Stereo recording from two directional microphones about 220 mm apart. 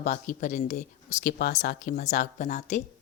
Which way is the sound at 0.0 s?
35° left (ahead or behind).